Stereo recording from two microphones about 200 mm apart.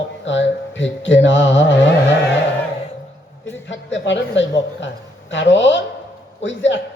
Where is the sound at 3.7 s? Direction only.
65° left (ahead or behind).